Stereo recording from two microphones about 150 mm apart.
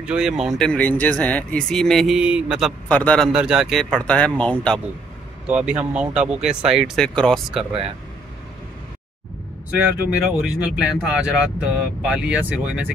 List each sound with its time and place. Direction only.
0.0 s speech: 5° right (ahead or behind)
2.9 s a man's voice: 10° left (ahead or behind)
3.3 s speech: 5° right (ahead or behind)
5.5 s speech: 10° right (ahead or behind)
10.1 s speech: 5° right (ahead or behind)